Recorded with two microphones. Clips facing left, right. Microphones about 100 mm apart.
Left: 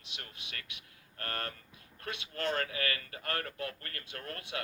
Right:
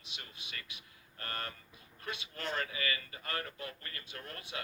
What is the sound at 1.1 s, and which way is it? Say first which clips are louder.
Speech: left 3 dB; 55° left (ahead or behind).